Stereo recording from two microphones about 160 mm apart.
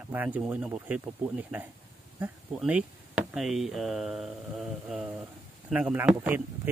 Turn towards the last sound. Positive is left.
turn(degrees=-10)  # may be behind; listen again after turning